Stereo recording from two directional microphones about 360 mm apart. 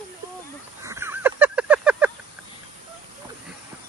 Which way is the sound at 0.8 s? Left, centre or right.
Centre.